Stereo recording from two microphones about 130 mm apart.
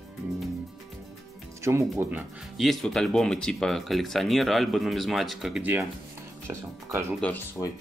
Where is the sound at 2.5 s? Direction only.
Centre (ahead or behind).